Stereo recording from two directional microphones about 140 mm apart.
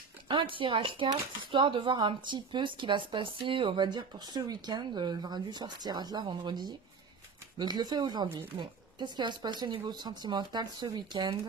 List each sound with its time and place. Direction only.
0.3 s speech: 35° right (ahead or behind)